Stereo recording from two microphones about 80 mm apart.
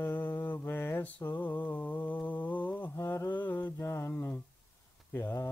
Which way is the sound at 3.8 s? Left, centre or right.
Left.